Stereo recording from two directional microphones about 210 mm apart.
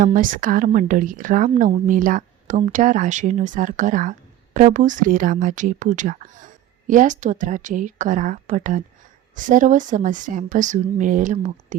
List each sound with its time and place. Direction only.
0.0 s speech: 40° right (ahead or behind)